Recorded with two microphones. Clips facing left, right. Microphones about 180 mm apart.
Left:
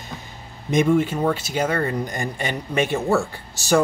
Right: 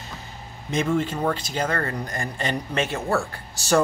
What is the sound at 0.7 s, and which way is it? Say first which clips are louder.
Speech: left 5 dB; 10° left (ahead or behind).